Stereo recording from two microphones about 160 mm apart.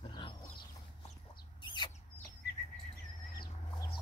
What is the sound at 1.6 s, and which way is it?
Chicken, 30° left (ahead or behind).